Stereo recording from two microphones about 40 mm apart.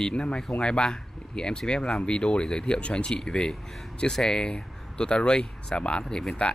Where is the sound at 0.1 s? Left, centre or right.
Left.